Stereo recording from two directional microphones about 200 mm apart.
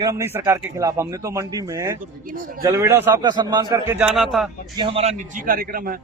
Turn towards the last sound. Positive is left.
turn(degrees=-45)  # may be behind; listen again after turning